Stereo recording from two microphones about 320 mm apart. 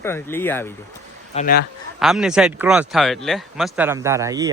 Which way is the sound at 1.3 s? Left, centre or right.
Left.